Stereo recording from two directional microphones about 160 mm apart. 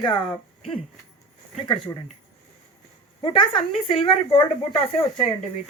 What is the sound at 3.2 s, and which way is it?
Speech, 35° left (ahead or behind).